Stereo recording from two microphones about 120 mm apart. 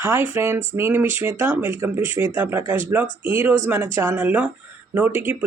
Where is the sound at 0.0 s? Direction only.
20° right (ahead or behind).